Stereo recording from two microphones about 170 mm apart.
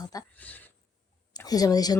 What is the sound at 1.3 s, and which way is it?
Speech, 20° left (ahead or behind).